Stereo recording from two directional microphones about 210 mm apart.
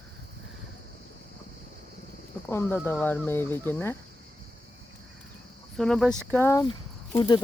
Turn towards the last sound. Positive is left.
turn(degrees=20)  # may be behind; listen again after turning